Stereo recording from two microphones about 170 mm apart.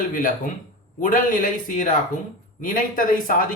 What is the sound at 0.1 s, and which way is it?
Speech, 55° left (ahead or behind).